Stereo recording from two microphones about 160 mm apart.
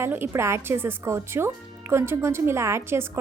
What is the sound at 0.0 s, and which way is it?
A woman's voice, 15° right (ahead or behind).